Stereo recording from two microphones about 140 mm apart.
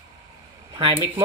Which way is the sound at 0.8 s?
40° right (ahead or behind).